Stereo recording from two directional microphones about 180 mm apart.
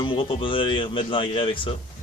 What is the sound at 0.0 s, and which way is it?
Speech, 30° left (ahead or behind).